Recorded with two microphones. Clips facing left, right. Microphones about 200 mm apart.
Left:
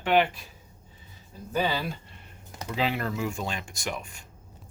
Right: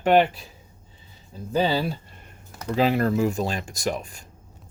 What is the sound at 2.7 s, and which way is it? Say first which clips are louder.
Speech: right 8 dB; 40° right (ahead or behind).